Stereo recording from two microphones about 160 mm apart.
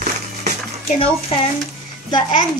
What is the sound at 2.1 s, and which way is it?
Speech, 30° left (ahead or behind).